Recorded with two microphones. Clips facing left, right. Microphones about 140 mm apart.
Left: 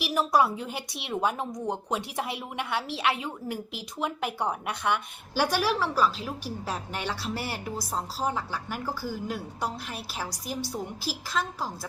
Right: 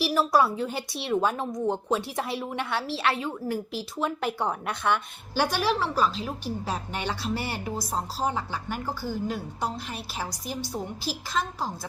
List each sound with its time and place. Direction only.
0.0 s a woman's voice: 15° left (ahead or behind)
11.0 s a woman's voice: 5° left (ahead or behind)